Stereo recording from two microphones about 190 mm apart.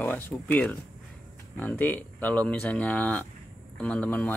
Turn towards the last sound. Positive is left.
turn(degrees=5)  # may be behind; listen again after turning